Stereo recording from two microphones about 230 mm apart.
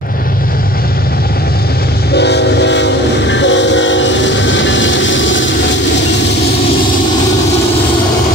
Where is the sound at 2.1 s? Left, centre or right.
Left.